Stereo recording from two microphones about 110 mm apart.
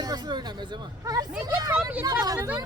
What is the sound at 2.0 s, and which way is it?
Speech, 35° right (ahead or behind).